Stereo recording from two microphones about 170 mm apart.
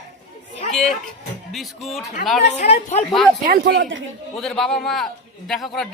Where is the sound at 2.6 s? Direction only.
40° left (ahead or behind).